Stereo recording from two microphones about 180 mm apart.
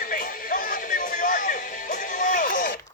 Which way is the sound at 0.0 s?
50° left (ahead or behind).